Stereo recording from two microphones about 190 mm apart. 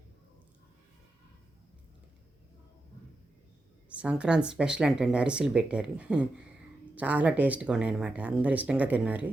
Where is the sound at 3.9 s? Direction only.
5° right (ahead or behind).